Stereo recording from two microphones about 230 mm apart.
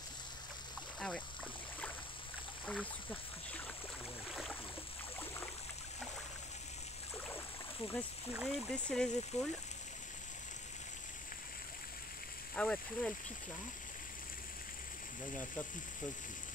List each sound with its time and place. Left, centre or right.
0.9 s rowboat: centre
2.6 s boat: centre
7.8 s a sound: left
8.3 s speech: centre
12.5 s speech: centre